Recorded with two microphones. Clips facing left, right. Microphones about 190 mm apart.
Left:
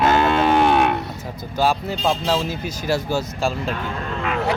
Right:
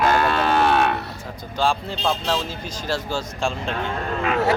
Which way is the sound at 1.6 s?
10° left (ahead or behind).